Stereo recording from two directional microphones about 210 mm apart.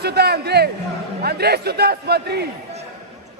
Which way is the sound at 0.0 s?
50° right (ahead or behind).